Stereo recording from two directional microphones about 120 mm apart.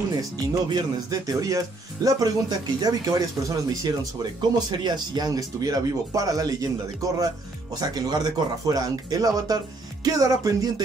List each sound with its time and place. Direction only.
0.2 s speech: 35° right (ahead or behind)